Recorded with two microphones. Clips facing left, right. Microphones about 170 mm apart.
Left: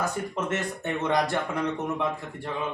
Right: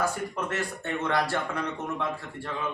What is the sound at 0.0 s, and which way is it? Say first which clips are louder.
Speech: even; 20° left (ahead or behind).